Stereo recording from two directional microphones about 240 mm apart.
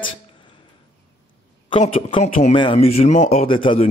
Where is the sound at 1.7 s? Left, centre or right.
Left.